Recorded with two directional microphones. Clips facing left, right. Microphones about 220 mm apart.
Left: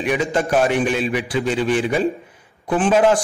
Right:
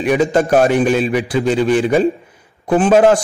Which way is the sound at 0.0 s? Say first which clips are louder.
Right 6 dB; 40° right (ahead or behind).